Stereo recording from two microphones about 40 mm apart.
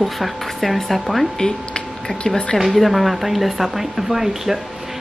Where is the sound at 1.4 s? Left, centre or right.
Centre.